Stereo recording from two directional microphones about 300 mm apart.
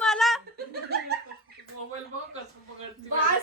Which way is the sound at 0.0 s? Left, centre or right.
Centre.